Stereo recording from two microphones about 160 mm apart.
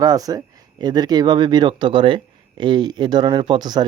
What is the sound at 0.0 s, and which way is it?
Speech, 25° right (ahead or behind).